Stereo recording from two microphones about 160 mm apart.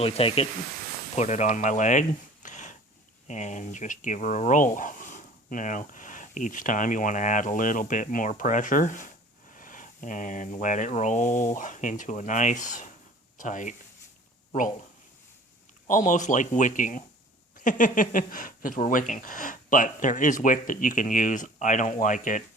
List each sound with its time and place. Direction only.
0.0 s speech: 35° left (ahead or behind); by 13.7 s 50° left (ahead or behind)
15.9 s speech: 50° left (ahead or behind)